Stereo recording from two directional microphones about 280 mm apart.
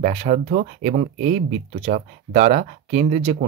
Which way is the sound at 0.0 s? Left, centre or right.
Right.